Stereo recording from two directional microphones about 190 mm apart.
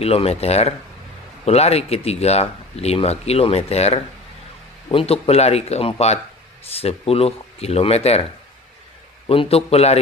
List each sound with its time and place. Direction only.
0.0 s speech: 30° left (ahead or behind)
9.3 s speech: 30° left (ahead or behind)